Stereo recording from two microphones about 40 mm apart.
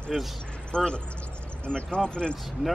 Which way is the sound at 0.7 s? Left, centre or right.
Left.